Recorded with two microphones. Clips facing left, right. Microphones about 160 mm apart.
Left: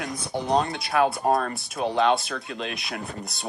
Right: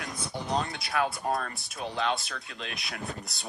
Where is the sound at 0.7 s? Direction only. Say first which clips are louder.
Left 7 dB; 65° left (ahead or behind).